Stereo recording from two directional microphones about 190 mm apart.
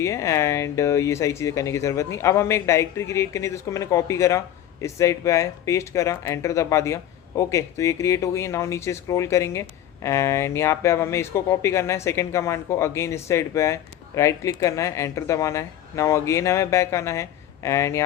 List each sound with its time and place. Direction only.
0.0 s speech: 15° left (ahead or behind)